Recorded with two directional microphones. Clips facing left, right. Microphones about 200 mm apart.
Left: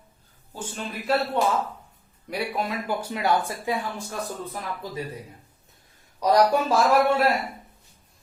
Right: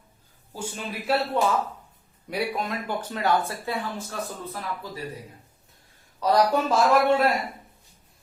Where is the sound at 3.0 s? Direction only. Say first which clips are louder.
Right 1 dB; 10° left (ahead or behind).